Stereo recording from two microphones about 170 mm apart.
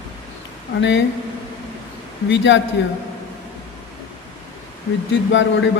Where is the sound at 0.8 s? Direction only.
90° left.